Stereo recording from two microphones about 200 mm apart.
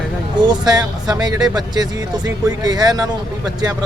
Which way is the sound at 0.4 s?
20° right (ahead or behind).